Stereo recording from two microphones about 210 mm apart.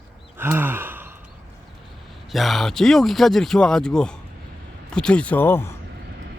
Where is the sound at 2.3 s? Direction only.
Centre (ahead or behind).